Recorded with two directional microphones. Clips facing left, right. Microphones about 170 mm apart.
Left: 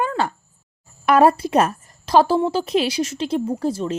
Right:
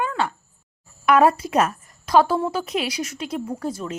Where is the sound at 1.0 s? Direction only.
35° left (ahead or behind).